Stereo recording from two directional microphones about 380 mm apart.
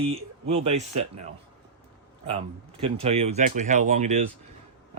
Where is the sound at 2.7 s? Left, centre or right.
Centre.